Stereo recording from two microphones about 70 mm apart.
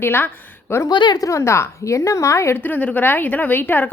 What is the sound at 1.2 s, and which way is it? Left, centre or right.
A woman's voice, left.